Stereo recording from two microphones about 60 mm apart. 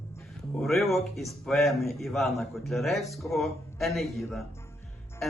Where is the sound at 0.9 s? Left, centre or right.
Centre.